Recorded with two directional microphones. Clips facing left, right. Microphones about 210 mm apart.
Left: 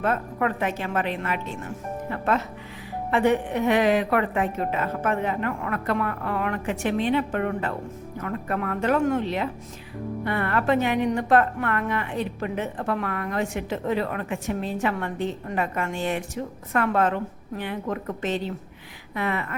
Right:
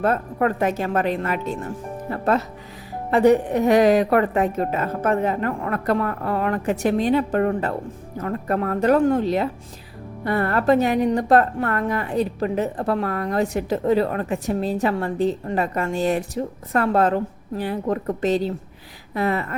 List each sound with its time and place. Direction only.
0.0 s a woman's voice: 40° right (ahead or behind)